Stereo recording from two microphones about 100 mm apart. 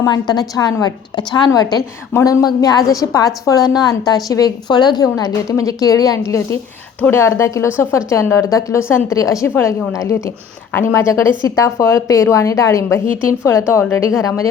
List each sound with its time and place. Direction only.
0.0 s a woman's voice: 45° left (ahead or behind)